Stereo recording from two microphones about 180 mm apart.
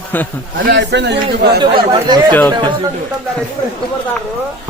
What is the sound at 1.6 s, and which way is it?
Speech, 25° right (ahead or behind).